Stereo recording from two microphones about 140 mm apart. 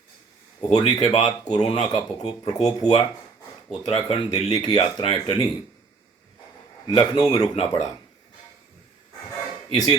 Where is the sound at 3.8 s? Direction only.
45° left (ahead or behind).